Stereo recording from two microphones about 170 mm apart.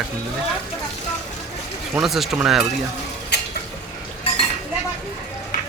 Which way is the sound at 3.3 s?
75° left (ahead or behind).